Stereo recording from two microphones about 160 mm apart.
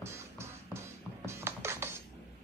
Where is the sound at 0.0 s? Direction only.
15° right (ahead or behind).